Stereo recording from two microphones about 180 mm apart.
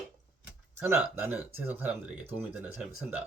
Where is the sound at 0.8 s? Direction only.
10° right (ahead or behind).